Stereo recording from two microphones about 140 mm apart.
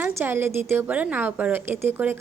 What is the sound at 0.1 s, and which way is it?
A woman's voice, 15° right (ahead or behind).